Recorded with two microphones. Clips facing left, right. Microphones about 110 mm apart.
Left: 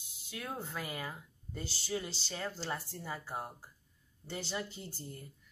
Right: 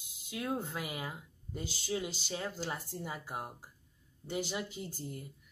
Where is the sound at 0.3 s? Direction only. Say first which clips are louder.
Right 5 dB; 10° right (ahead or behind).